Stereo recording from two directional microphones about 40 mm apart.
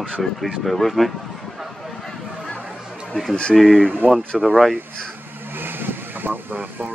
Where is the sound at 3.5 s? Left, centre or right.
Centre.